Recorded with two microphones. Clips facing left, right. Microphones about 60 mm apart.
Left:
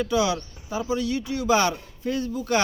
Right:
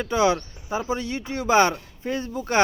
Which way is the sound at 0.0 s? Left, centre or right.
Right.